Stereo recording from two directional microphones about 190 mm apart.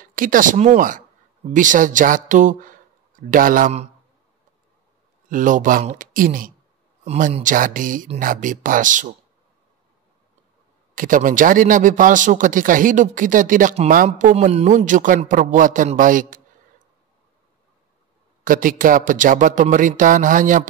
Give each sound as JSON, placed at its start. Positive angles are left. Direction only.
{"t": 0.0, "sound": "speech", "side_deg": -45}
{"t": 5.3, "sound": "speech", "side_deg": -45}
{"t": 11.0, "sound": "speech", "side_deg": -45}
{"t": 18.4, "sound": "speech", "side_deg": -45}